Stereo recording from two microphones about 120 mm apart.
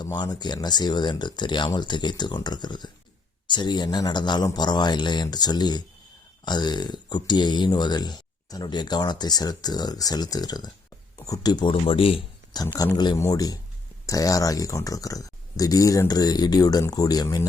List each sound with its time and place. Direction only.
0.0 s speech: 35° left (ahead or behind)
11.7 s speech: 50° left (ahead or behind)
12.6 s speech: 20° left (ahead or behind)